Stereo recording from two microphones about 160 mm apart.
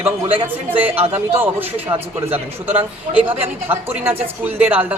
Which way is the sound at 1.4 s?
10° right (ahead or behind).